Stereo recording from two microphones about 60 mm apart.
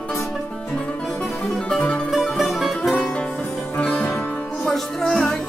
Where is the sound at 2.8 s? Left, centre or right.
Centre.